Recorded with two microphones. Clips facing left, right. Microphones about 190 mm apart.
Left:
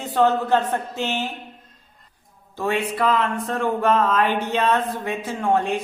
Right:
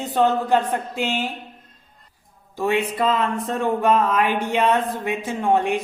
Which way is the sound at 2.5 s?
15° right (ahead or behind).